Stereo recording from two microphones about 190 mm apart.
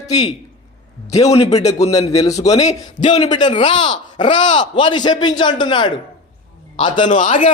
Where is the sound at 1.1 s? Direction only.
35° left (ahead or behind).